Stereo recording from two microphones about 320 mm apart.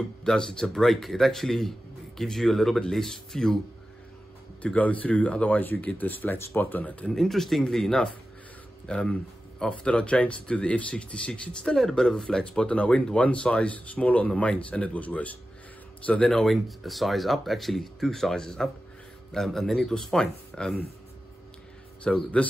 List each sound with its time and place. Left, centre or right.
0.2 s speech: centre
4.6 s speech: centre
22.0 s speech: centre